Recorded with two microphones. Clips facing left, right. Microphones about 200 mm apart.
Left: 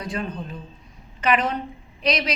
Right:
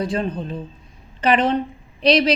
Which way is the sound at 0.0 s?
30° right (ahead or behind).